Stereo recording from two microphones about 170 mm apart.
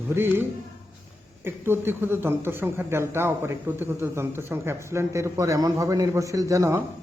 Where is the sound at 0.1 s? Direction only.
15° right (ahead or behind).